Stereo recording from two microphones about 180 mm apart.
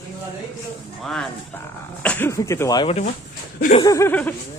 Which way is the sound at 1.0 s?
5° left (ahead or behind).